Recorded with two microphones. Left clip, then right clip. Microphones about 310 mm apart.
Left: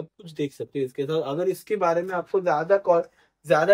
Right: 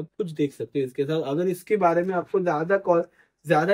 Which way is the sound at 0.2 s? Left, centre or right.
Centre.